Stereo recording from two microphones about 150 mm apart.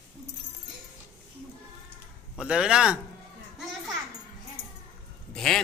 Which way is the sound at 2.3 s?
5° right (ahead or behind).